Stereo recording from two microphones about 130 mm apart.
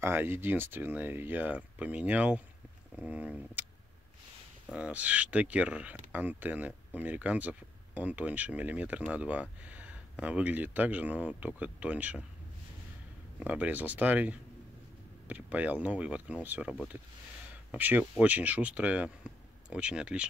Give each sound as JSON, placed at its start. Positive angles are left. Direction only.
{"t": 0.0, "sound": "speech", "side_deg": -15}
{"t": 4.6, "sound": "speech", "side_deg": -10}
{"t": 13.4, "sound": "speech", "side_deg": -10}